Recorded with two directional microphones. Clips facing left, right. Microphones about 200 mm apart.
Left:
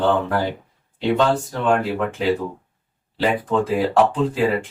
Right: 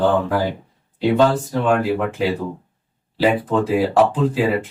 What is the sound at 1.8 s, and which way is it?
Speech, 5° right (ahead or behind).